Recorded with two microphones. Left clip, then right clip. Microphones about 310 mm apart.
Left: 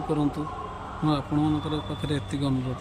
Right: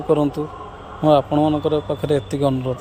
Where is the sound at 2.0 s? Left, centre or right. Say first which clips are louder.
Right 11 dB; centre.